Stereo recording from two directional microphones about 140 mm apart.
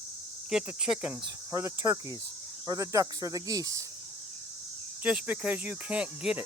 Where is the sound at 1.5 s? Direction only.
20° right (ahead or behind).